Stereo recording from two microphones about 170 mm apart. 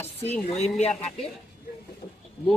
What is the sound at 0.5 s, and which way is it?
Speech, 40° left (ahead or behind).